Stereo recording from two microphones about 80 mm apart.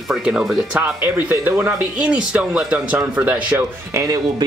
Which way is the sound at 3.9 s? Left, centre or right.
Right.